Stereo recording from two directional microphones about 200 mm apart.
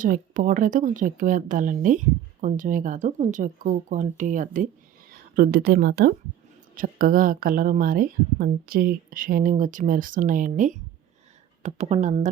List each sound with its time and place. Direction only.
0.0 s a woman's voice: 40° right (ahead or behind)